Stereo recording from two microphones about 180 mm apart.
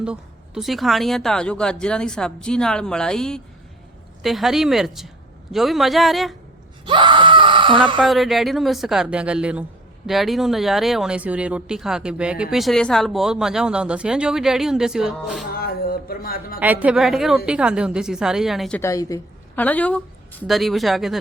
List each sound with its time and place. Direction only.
0.0 s speech: 5° right (ahead or behind)
6.8 s screaming: 25° right (ahead or behind)
8.0 s speech: centre (ahead or behind)
15.5 s a sound: 55° left (ahead or behind)
16.6 s speech: 5° right (ahead or behind)
18.8 s a woman's voice: 15° left (ahead or behind); by 21.2 s centre (ahead or behind)